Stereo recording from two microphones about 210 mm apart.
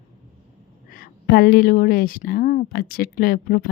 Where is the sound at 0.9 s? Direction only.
45° left (ahead or behind).